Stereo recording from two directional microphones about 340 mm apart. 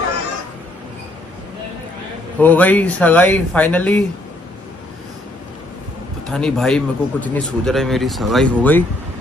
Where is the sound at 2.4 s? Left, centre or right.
Centre.